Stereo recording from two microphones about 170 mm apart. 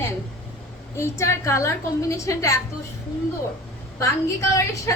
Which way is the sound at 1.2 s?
15° left (ahead or behind).